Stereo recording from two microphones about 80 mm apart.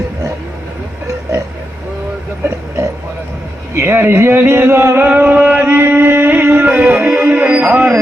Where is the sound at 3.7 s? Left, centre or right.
Right.